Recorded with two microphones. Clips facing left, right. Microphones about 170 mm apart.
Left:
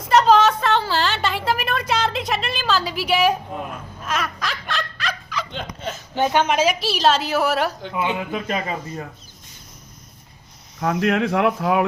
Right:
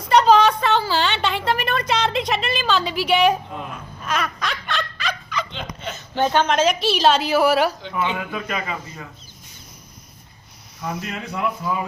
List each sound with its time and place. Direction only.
0.1 s a sound: centre (ahead or behind)
5.5 s hiccup: 50° left (ahead or behind)
5.9 s a woman's voice: 10° left (ahead or behind)
7.9 s speech: 25° left (ahead or behind)
10.8 s speech: 75° left (ahead or behind)